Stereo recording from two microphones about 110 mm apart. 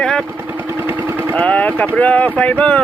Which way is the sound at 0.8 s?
20° right (ahead or behind).